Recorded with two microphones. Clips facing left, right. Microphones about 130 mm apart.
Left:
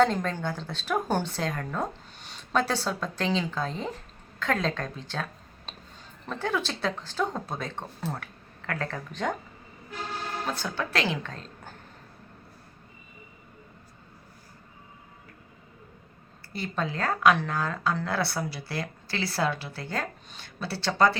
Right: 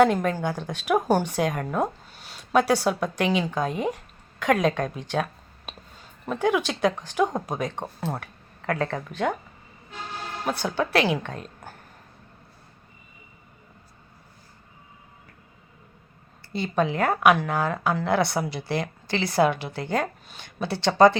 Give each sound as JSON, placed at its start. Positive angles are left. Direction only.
{"t": 0.0, "sound": "a woman's voice", "side_deg": -10}
{"t": 10.6, "sound": "a woman's voice", "side_deg": -15}
{"t": 16.5, "sound": "a woman's voice", "side_deg": -20}